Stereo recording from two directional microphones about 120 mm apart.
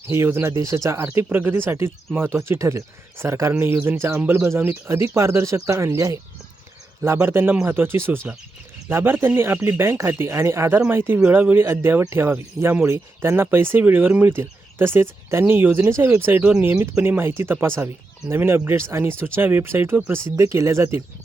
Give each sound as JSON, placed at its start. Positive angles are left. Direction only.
{"t": 0.1, "sound": "speech", "side_deg": -20}